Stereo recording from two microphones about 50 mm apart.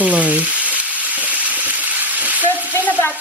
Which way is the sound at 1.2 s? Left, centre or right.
Right.